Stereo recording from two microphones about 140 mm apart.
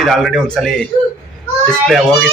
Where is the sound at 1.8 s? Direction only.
Centre (ahead or behind).